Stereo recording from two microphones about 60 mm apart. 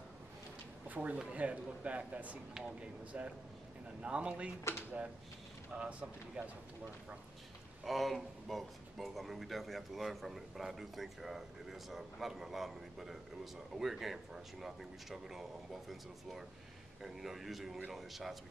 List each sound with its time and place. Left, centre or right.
0.8 s speech: right
5.8 s speech: centre
7.8 s a man's voice: centre
17.0 s a man's voice: centre